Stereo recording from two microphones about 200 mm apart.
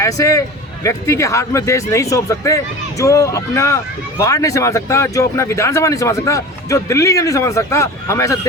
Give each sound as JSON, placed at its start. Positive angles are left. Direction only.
{"t": 0.0, "sound": "speech", "side_deg": 15}